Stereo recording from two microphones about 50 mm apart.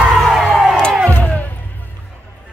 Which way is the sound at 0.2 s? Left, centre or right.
Centre.